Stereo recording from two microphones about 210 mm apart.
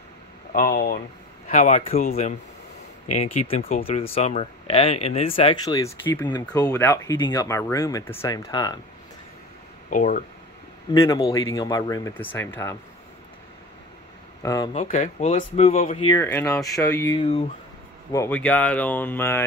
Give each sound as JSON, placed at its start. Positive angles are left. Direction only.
{"t": 0.5, "sound": "speech", "side_deg": 45}
{"t": 1.5, "sound": "speech", "side_deg": 35}
{"t": 3.2, "sound": "speech", "side_deg": 30}
{"t": 5.8, "sound": "speech", "side_deg": 10}
{"t": 9.8, "sound": "speech", "side_deg": 40}
{"t": 10.9, "sound": "speech", "side_deg": 15}
{"t": 14.4, "sound": "speech", "side_deg": 15}
{"t": 14.7, "sound": "speech", "side_deg": 35}
{"t": 16.1, "sound": "speech", "side_deg": 10}
{"t": 16.8, "sound": "speech", "side_deg": 15}
{"t": 17.2, "sound": "speech", "side_deg": 30}
{"t": 18.1, "sound": "speech", "side_deg": 10}